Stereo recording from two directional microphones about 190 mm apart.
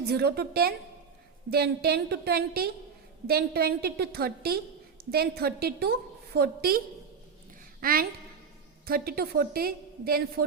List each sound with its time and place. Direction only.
0.0 s a woman's voice: 55° right (ahead or behind)